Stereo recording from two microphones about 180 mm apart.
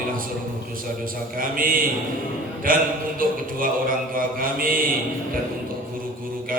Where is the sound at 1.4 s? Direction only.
50° right (ahead or behind).